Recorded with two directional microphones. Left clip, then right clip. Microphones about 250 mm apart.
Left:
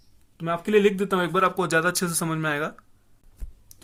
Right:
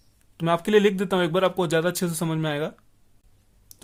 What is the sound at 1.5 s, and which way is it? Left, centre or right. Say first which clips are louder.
Speech: left 1 dB; right.